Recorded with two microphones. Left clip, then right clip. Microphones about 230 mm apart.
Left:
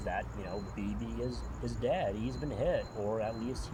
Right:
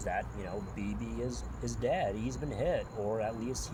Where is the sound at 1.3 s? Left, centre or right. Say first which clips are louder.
Even; right.